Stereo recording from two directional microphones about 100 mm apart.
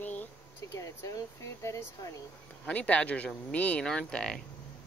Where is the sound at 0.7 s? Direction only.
30° left (ahead or behind).